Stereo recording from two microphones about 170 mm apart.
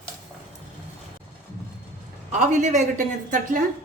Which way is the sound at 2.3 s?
45° right (ahead or behind).